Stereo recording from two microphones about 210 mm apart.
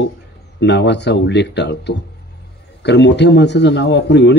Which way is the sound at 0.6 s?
55° left (ahead or behind).